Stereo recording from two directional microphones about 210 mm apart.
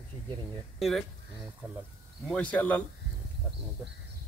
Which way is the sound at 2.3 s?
5° left (ahead or behind).